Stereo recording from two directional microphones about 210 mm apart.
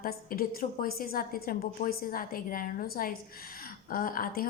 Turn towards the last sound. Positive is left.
turn(degrees=40)  # may be behind; listen again after turning